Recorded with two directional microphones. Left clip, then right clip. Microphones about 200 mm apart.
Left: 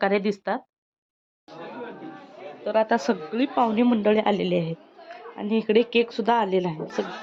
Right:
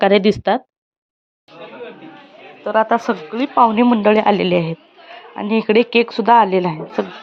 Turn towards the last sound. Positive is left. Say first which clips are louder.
# right 7 dB
turn(degrees=-10)  # may be behind; listen again after turning